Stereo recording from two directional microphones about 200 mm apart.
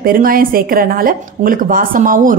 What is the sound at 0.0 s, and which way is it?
A woman's voice, 45° right (ahead or behind).